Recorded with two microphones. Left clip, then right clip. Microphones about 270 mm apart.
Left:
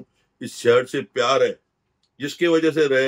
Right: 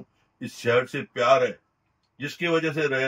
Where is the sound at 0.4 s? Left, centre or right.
Centre.